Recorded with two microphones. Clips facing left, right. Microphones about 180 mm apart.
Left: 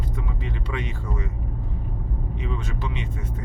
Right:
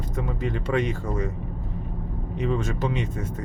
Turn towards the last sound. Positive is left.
turn(degrees=-45)  # may be behind; listen again after turning